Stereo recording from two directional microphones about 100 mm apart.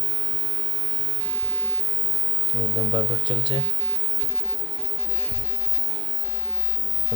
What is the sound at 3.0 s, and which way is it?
Speech, 55° left (ahead or behind).